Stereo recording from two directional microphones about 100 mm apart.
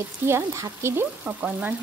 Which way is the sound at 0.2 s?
25° right (ahead or behind).